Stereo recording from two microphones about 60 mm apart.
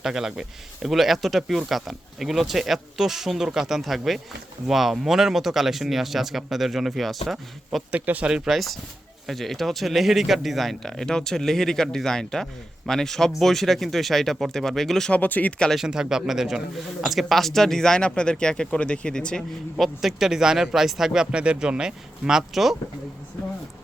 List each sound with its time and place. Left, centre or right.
0.0 s speech: centre
7.9 s speech: right
8.4 s speech: centre
15.1 s speech: left
15.7 s a man's voice: centre
19.4 s a man's voice: centre